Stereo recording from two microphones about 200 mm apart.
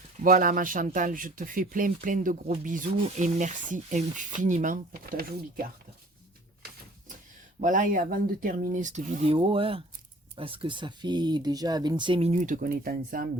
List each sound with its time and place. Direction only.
0.2 s speech: 45° right (ahead or behind)
7.6 s speech: 40° right (ahead or behind)